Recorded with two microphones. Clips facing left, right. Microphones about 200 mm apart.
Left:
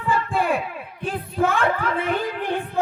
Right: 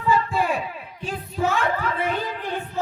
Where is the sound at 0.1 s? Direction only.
55° left (ahead or behind).